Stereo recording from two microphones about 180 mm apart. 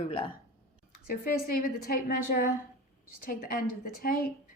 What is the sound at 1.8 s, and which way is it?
A woman's voice, 60° left (ahead or behind).